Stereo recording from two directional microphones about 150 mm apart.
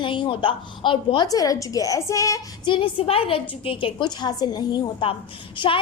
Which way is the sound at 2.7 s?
35° left (ahead or behind).